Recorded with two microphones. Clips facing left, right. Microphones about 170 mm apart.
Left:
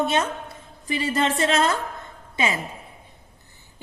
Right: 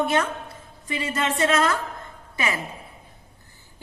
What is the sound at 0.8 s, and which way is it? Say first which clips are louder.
Speech: left 3 dB; 30° left (ahead or behind).